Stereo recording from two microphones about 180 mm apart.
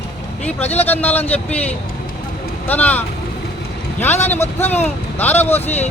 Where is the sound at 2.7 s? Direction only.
10° left (ahead or behind).